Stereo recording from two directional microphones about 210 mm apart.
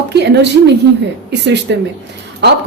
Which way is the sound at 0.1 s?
55° right (ahead or behind).